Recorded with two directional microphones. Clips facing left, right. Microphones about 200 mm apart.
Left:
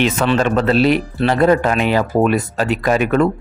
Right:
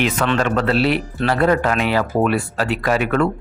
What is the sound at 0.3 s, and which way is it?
Speech, 25° left (ahead or behind).